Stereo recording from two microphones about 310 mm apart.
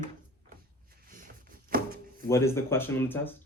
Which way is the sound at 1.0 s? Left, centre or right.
Right.